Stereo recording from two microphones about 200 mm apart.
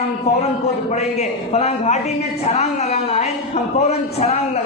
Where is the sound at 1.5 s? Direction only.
35° left (ahead or behind).